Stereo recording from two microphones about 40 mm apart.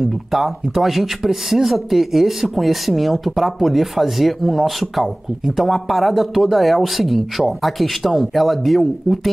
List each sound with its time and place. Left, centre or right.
0.0 s speech: centre